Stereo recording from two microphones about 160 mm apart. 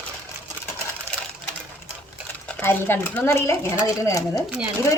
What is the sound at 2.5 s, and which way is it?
A woman's voice, 10° left (ahead or behind).